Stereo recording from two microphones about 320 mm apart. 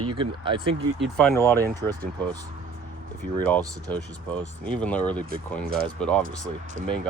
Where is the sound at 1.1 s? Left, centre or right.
Centre.